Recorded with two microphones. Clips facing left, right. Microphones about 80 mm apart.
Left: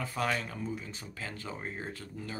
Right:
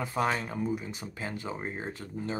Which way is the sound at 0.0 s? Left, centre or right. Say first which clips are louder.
Right 3 dB; right.